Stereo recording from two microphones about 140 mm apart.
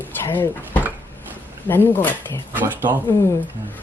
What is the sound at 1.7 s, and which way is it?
Speech, 15° left (ahead or behind).